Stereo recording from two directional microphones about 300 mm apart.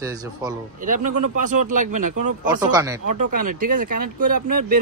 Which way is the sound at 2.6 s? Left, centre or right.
Centre.